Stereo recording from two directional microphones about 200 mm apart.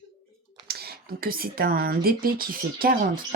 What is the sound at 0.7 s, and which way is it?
Speech, 50° right (ahead or behind).